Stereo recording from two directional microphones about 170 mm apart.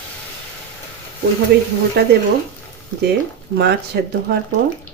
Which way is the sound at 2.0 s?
75° right (ahead or behind).